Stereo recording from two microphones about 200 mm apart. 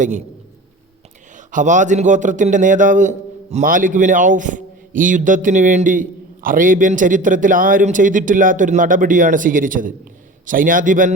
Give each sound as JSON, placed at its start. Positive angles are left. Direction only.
{"t": 1.5, "sound": "a man's voice", "side_deg": -40}